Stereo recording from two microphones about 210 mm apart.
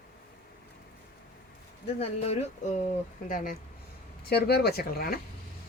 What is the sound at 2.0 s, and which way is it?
Speech, 30° left (ahead or behind).